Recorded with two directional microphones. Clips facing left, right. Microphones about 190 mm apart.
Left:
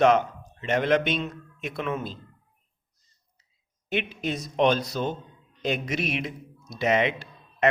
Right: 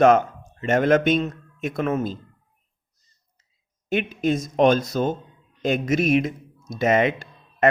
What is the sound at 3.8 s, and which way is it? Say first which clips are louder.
A man's voice: right 7 dB; 45° right (ahead or behind).